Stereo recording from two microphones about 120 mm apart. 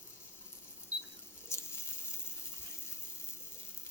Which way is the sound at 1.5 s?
20° left (ahead or behind).